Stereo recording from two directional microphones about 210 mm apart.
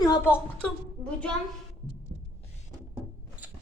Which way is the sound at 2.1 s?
55° right (ahead or behind).